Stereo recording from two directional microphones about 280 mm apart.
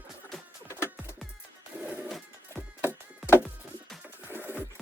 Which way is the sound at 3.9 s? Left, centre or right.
Centre.